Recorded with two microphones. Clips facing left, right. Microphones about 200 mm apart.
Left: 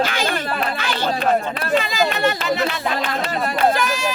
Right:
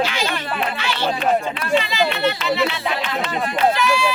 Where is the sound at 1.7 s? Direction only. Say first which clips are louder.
Even; 45° left (ahead or behind).